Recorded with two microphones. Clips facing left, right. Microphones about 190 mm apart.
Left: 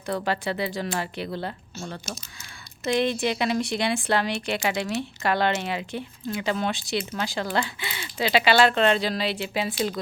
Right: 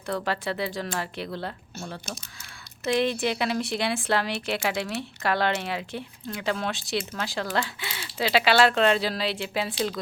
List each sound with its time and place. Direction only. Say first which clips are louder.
0.0 s speech: left 2 dB; centre (ahead or behind)
2.9 s speech: left 1 dB; centre (ahead or behind)